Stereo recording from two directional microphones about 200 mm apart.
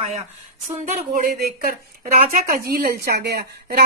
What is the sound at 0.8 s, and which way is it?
A woman's voice, 45° right (ahead or behind).